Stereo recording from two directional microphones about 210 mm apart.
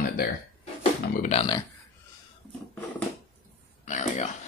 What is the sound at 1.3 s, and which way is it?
Speech, 30° left (ahead or behind).